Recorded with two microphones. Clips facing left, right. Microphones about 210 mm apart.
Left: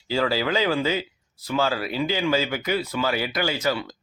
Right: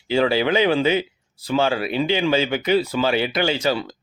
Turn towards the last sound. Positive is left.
turn(degrees=-25)  # may be behind; listen again after turning